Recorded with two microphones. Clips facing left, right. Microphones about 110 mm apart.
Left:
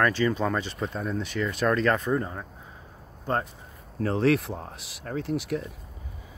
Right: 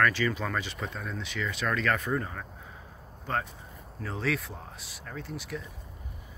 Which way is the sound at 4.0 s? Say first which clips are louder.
Left 9 dB; 60° left (ahead or behind).